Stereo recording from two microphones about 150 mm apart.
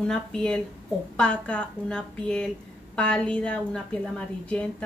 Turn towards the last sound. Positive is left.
turn(degrees=10)  # may be behind; listen again after turning